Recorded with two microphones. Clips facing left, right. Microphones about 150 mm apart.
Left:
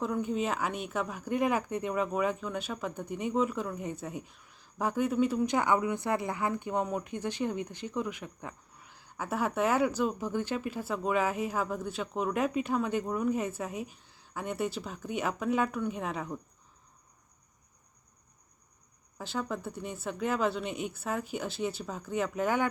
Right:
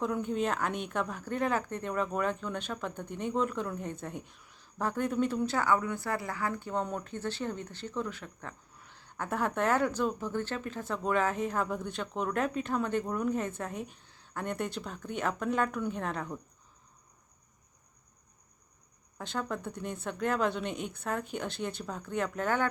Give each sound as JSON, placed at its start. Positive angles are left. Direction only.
{"t": 0.0, "sound": "speech", "side_deg": 5}
{"t": 19.2, "sound": "a woman's voice", "side_deg": 5}